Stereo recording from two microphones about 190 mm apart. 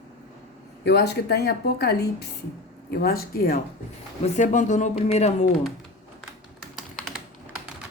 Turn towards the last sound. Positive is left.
turn(degrees=5)  # may be behind; listen again after turning